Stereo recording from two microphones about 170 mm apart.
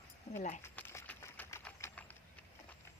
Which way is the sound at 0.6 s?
15° left (ahead or behind).